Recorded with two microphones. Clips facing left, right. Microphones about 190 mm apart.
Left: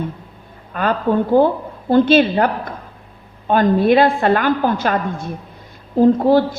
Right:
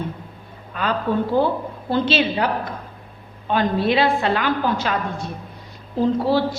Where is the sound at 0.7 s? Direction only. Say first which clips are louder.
Left 5 dB; 50° left (ahead or behind).